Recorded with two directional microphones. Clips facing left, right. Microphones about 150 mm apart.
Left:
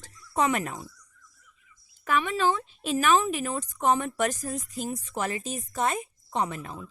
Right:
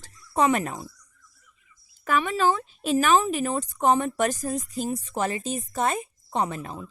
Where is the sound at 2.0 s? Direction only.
40° right (ahead or behind).